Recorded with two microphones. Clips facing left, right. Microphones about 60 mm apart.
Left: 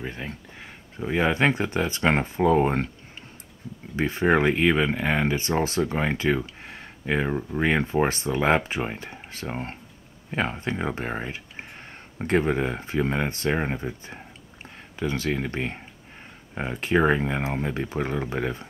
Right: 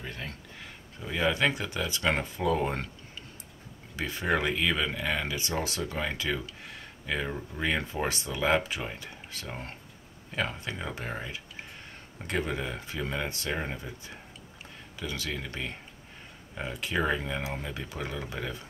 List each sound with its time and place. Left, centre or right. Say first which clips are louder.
0.0 s speech: left 5 dB; left
3.9 s speech: left 8 dB; left